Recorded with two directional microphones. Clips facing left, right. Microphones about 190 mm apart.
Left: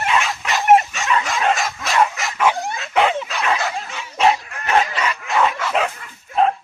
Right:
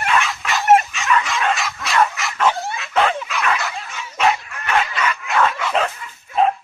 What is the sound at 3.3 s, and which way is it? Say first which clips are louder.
Dog: left 1 dB; 30° left (ahead or behind).